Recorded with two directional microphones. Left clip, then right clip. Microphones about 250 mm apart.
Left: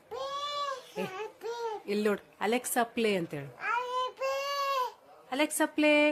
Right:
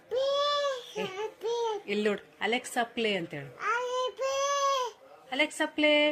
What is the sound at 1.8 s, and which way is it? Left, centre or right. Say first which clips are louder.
A woman's voice: right 1 dB; centre.